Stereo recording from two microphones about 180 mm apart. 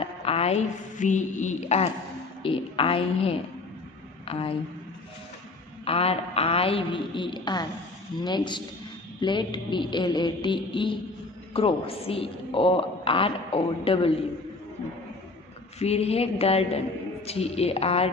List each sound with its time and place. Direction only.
0.0 s a woman's voice: 35° left (ahead or behind)
5.9 s a woman's voice: 35° left (ahead or behind)
15.8 s a woman's voice: 35° left (ahead or behind)